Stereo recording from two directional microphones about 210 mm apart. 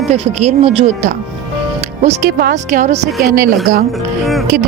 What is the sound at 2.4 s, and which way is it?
Speech, 40° right (ahead or behind).